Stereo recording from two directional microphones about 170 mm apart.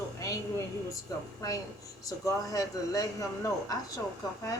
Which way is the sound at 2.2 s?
20° left (ahead or behind).